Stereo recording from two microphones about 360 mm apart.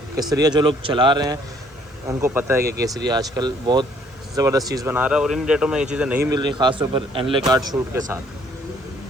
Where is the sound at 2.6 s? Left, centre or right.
Right.